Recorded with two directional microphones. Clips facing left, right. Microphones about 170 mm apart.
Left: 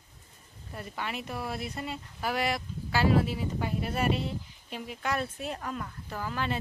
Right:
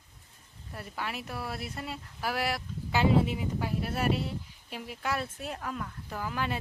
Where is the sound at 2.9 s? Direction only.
20° right (ahead or behind).